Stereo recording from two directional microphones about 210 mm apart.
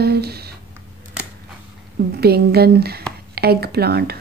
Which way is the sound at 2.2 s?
50° right (ahead or behind).